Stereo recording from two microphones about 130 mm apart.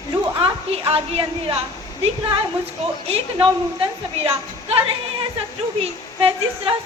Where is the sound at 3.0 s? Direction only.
50° right (ahead or behind).